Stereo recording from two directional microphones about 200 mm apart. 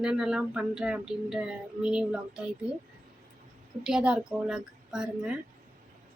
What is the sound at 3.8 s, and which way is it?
Speech, 5° right (ahead or behind).